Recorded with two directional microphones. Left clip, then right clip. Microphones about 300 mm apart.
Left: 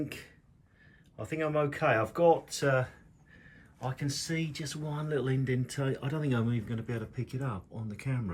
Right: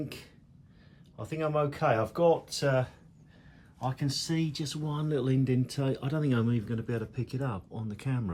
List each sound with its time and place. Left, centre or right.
0.0 s speech: centre